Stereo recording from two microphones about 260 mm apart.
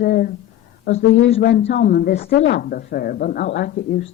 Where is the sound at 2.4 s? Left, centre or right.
Left.